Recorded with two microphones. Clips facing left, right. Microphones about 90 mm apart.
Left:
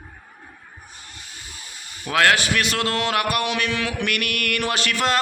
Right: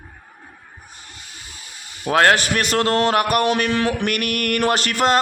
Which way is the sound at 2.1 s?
40° right (ahead or behind).